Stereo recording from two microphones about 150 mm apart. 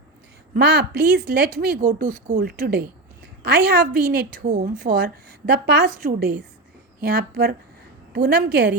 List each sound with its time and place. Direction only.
0.5 s a woman's voice: 90° right